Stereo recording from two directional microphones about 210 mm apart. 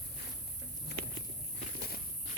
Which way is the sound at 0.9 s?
50° left (ahead or behind).